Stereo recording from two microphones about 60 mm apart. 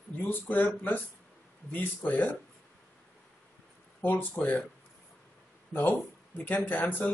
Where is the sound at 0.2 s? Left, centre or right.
Left.